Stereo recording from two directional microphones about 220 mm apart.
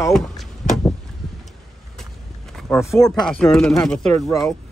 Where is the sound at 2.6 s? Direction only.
Centre (ahead or behind).